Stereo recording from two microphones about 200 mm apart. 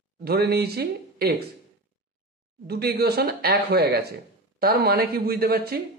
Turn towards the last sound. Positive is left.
turn(degrees=-50)  # may be behind; listen again after turning